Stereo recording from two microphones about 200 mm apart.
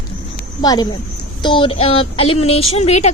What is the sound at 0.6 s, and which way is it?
Speech, 20° left (ahead or behind).